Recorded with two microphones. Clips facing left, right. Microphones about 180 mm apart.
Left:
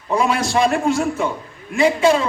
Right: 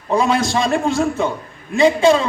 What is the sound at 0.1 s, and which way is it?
Speech, 30° right (ahead or behind).